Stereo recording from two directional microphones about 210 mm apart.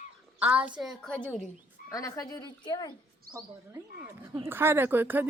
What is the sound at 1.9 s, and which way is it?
Speech, 15° left (ahead or behind).